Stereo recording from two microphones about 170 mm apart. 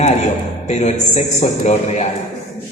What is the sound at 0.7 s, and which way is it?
A woman's voice, 40° left (ahead or behind).